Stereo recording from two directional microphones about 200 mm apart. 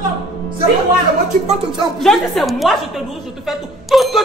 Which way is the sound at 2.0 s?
Centre (ahead or behind).